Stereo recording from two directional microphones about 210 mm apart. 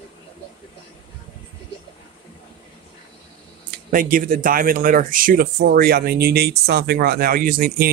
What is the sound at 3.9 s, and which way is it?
Speech, 40° right (ahead or behind).